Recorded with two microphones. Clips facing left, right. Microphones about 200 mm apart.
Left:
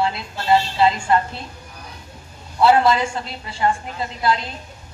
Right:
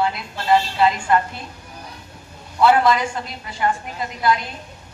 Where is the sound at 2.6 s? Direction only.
25° left (ahead or behind).